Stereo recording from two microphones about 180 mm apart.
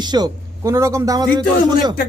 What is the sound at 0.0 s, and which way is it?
A man's voice, 25° right (ahead or behind).